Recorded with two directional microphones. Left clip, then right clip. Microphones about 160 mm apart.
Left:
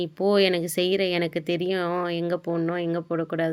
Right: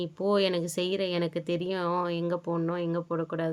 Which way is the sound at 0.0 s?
10° left (ahead or behind).